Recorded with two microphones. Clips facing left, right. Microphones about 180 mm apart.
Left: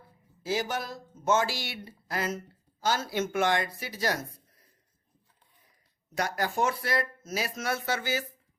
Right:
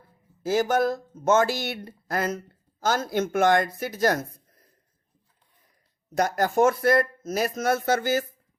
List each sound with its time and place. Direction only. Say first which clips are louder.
0.4 s speech: right 9 dB; 50° right (ahead or behind)
6.1 s speech: right 7 dB; 45° right (ahead or behind)